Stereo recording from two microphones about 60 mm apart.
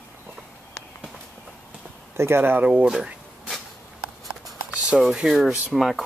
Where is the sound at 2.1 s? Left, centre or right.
Right.